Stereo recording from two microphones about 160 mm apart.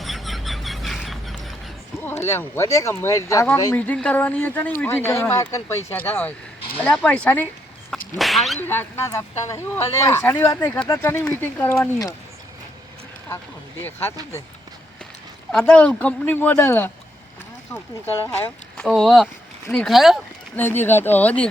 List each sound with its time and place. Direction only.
0.0 s a sound: centre (ahead or behind)
2.0 s speech: 15° left (ahead or behind)
3.8 s speech: 5° left (ahead or behind)
7.9 s speech: centre (ahead or behind)
8.6 s speech: 15° left (ahead or behind)
15.5 s speech: 5° left (ahead or behind)
18.0 s speech: 15° left (ahead or behind)
18.9 s speech: centre (ahead or behind)
20.6 s speech: 15° left (ahead or behind)